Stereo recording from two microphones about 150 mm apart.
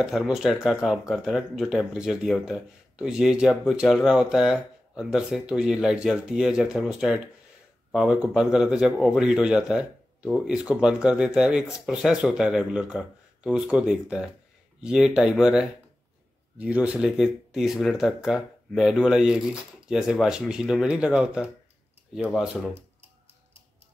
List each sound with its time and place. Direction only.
0.0 s a man's voice: centre (ahead or behind)